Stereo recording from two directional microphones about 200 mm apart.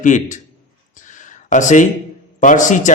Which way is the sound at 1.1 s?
40° left (ahead or behind).